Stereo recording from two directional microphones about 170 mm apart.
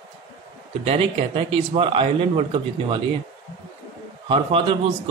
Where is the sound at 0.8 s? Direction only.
35° right (ahead or behind).